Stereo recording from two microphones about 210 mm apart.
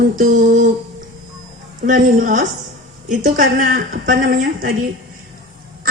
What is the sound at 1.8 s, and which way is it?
A woman's voice, 40° right (ahead or behind).